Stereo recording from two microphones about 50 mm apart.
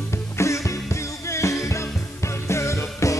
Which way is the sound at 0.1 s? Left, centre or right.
Left.